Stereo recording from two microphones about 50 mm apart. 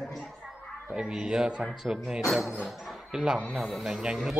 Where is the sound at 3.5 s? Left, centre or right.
Centre.